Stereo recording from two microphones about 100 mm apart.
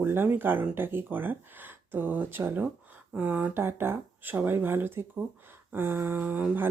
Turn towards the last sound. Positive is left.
turn(degrees=-20)  # may be behind; listen again after turning